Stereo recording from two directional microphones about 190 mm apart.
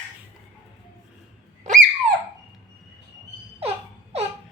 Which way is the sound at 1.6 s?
40° right (ahead or behind).